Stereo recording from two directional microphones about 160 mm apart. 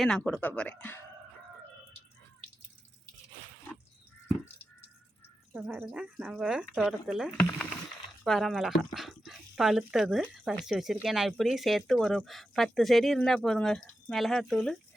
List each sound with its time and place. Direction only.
0.3 s speech: 5° left (ahead or behind)
5.5 s speech: 10° right (ahead or behind)